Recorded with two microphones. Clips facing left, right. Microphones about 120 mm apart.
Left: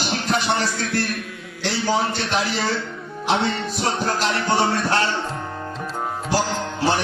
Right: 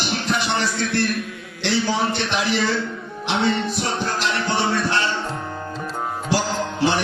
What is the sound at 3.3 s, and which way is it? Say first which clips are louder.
Music: right 1 dB; 45° left (ahead or behind).